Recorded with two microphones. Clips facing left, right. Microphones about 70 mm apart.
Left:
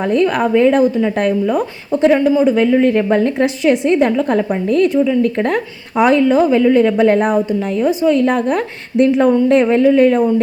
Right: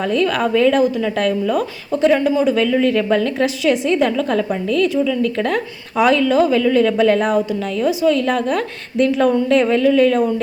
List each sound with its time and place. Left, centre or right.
0.0 s a woman's voice: left